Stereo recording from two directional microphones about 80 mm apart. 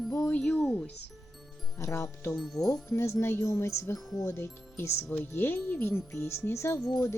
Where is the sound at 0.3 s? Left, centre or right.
Centre.